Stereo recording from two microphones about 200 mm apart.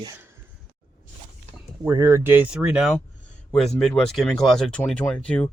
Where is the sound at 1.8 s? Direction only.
15° right (ahead or behind).